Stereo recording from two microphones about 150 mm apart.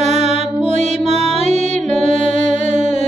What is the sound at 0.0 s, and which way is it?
Mantra, 45° right (ahead or behind).